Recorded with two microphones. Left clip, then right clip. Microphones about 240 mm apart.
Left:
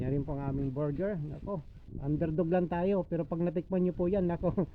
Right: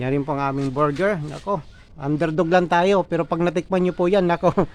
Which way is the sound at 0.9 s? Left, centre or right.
Centre.